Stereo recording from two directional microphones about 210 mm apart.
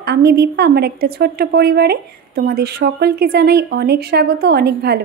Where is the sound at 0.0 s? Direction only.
50° right (ahead or behind).